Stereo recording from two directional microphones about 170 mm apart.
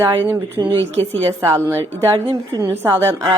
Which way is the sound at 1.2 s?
15° right (ahead or behind).